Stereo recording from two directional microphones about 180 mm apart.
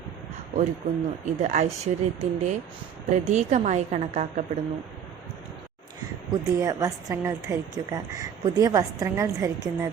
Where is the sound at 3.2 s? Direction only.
40° right (ahead or behind).